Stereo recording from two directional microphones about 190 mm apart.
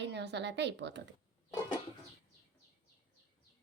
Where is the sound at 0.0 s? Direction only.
65° right (ahead or behind).